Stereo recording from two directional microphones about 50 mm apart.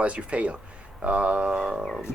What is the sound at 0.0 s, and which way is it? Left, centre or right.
Speech, right.